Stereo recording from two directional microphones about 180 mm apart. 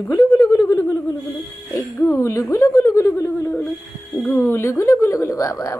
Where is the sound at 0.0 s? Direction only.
20° left (ahead or behind).